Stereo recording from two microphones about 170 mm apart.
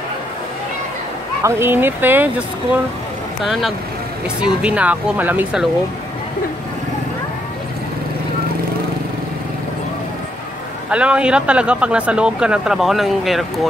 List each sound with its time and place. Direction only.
1.4 s speech: 15° right (ahead or behind)
4.4 s speech: 5° right (ahead or behind)
10.9 s speech: 5° right (ahead or behind)